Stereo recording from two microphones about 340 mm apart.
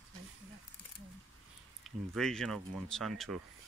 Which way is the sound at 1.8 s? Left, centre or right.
Centre.